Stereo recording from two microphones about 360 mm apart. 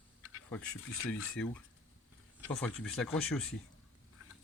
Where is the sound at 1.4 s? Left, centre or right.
Centre.